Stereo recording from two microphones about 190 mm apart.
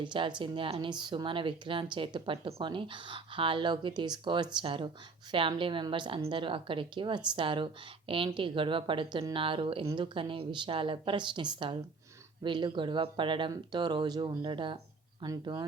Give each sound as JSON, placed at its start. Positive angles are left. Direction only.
{"t": 0.0, "sound": "speech", "side_deg": -25}